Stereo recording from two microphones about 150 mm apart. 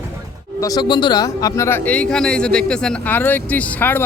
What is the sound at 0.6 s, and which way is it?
A man's voice, 25° left (ahead or behind).